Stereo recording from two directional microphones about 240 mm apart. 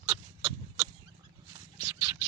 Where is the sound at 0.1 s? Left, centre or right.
Centre.